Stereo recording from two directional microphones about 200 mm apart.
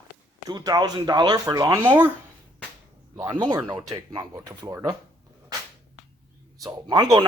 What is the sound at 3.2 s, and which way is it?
A man's voice, 20° right (ahead or behind).